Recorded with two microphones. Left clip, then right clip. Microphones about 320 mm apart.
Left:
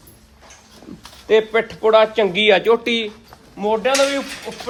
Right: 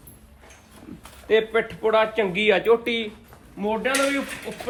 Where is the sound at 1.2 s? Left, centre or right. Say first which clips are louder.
Left 5 dB; left.